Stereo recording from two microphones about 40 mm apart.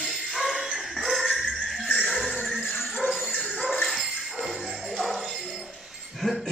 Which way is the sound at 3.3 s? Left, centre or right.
Left.